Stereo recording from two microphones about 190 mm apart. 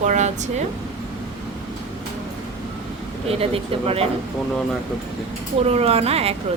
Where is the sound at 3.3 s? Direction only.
30° right (ahead or behind).